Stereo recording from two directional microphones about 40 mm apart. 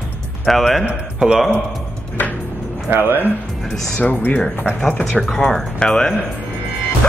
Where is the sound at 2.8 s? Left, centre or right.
Right.